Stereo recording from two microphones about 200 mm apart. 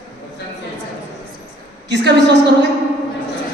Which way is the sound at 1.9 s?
60° right (ahead or behind).